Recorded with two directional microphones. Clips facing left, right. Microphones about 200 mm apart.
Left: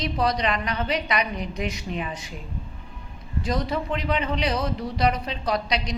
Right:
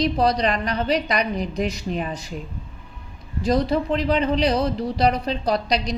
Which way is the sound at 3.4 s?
35° right (ahead or behind).